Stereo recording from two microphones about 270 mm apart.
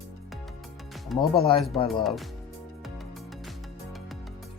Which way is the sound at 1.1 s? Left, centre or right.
Centre.